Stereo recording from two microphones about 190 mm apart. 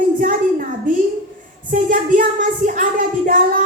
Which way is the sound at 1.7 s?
45° right (ahead or behind).